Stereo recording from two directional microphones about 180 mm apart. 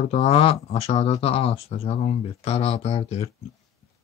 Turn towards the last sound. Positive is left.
turn(degrees=35)  # may be behind; listen again after turning